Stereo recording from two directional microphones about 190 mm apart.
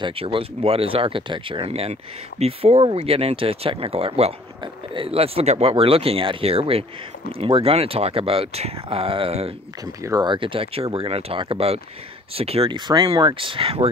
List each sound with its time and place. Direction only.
0.0 s speech: 30° right (ahead or behind)